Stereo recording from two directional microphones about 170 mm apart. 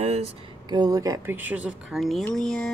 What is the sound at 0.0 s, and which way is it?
Speech, 40° right (ahead or behind).